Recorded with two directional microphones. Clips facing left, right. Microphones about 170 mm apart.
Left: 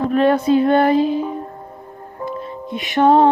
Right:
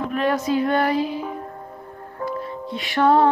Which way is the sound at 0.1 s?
30° left (ahead or behind).